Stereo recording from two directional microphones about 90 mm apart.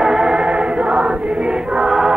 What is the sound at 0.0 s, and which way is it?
Choir, 5° right (ahead or behind).